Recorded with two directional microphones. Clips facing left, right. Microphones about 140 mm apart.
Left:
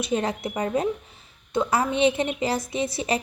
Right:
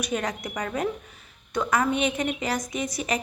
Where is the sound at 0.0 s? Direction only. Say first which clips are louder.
Left 3 dB; 30° left (ahead or behind).